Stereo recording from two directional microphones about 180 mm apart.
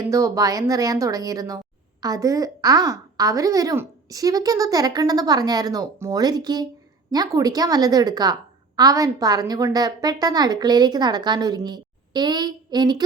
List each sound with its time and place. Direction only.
0.1 s a woman's voice: 20° right (ahead or behind)